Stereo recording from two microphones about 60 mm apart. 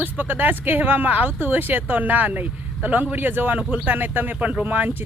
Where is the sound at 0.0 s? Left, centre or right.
Right.